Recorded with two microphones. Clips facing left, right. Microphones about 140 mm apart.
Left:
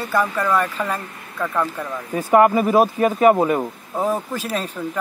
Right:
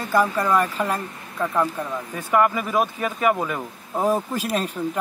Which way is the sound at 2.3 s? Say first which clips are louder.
Left 6 dB; 40° left (ahead or behind).